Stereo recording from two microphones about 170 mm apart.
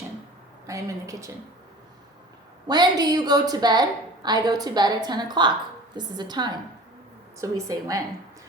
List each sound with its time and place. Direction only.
0.7 s a woman's voice: 20° right (ahead or behind)
2.6 s a woman's voice: 25° right (ahead or behind)